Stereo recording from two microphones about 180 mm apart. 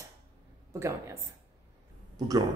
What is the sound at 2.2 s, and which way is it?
Speech, 20° right (ahead or behind).